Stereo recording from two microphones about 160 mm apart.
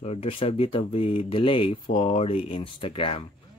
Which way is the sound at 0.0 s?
40° left (ahead or behind).